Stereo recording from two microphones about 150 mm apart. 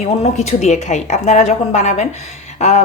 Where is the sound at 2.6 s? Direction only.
50° left (ahead or behind).